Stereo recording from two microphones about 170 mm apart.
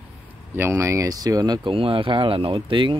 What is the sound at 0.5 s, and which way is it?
Speech, 15° right (ahead or behind).